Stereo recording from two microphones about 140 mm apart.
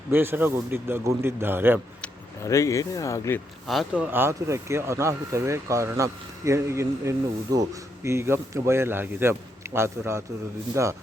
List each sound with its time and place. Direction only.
0.1 s speech: 15° right (ahead or behind)
2.4 s speech: 20° left (ahead or behind)
3.7 s speech: 5° right (ahead or behind); by 10.9 s 20° right (ahead or behind)